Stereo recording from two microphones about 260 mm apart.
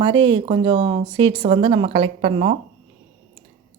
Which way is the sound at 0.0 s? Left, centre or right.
Centre.